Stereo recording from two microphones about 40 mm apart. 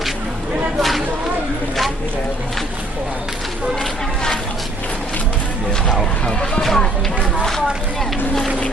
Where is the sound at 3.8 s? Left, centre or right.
Centre.